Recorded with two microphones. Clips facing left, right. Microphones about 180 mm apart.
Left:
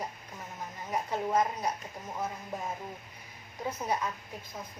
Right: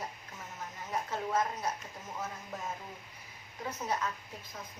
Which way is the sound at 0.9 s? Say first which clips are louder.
Left 4 dB; 15° left (ahead or behind).